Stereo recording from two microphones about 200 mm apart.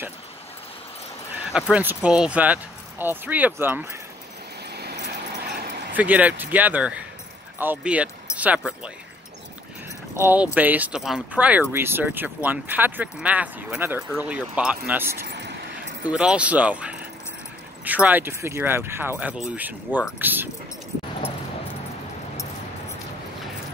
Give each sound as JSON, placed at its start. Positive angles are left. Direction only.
{"t": 1.7, "sound": "speech", "side_deg": -10}
{"t": 4.7, "sound": "vehicle", "side_deg": -55}
{"t": 5.9, "sound": "speech", "side_deg": -10}
{"t": 10.1, "sound": "speech", "side_deg": -10}
{"t": 15.2, "sound": "vehicle", "side_deg": -60}
{"t": 16.0, "sound": "speech", "side_deg": -5}